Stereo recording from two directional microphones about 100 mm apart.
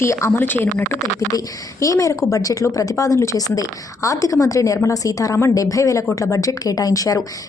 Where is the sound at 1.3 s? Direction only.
35° left (ahead or behind).